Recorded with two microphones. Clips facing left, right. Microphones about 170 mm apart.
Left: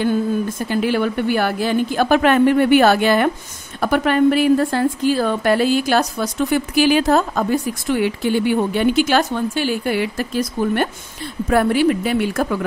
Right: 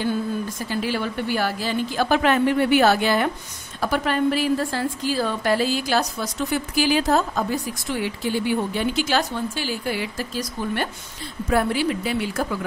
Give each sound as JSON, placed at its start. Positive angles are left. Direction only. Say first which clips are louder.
{"t": 0.6, "sound": "a woman's voice", "louder": "left 7 dB", "side_deg": 60}